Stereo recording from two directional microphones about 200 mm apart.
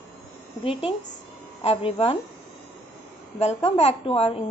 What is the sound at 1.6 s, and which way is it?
Speech, 30° left (ahead or behind).